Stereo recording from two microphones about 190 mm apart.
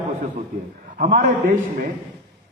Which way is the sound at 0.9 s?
45° right (ahead or behind).